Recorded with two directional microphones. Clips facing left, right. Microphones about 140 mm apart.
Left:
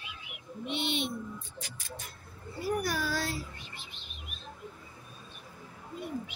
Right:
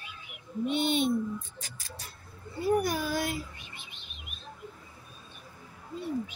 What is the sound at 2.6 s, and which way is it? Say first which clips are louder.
A child's voice: right 4 dB; 25° right (ahead or behind).